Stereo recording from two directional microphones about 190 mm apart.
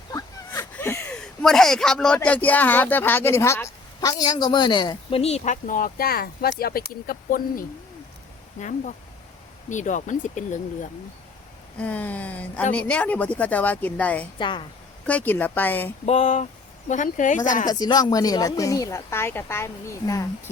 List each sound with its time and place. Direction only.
0.1 s speech: 15° left (ahead or behind)
5.2 s speech: 35° left (ahead or behind)
11.8 s speech: 10° left (ahead or behind)
14.3 s a woman's voice: 25° left (ahead or behind)
15.0 s speech: 10° left (ahead or behind)
16.0 s speech: 40° left (ahead or behind)
17.7 s speech: 20° left (ahead or behind)